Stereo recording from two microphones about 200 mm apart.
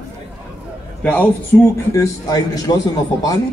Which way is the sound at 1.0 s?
10° left (ahead or behind).